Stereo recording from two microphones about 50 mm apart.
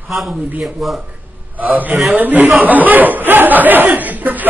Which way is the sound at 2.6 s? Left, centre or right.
Right.